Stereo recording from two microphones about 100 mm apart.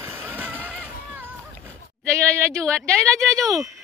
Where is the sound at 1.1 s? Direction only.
20° right (ahead or behind).